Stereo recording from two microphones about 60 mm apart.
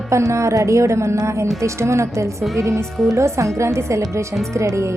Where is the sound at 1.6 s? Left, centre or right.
Right.